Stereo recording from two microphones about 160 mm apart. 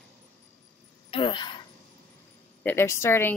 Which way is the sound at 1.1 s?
30° left (ahead or behind).